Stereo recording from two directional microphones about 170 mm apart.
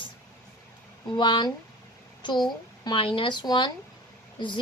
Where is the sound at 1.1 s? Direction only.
25° left (ahead or behind).